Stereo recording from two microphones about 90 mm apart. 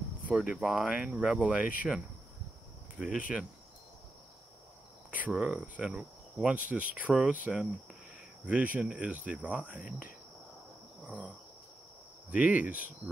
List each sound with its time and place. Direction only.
0.3 s cricket: 10° right (ahead or behind)
5.3 s cricket: 10° right (ahead or behind)
11.1 s cricket: 15° right (ahead or behind)